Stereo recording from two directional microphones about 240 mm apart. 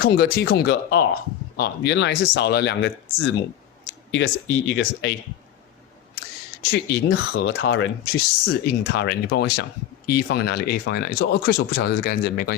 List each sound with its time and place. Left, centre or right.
0.0 s speech: left
6.7 s speech: left
7.3 s speech: left
8.6 s speech: left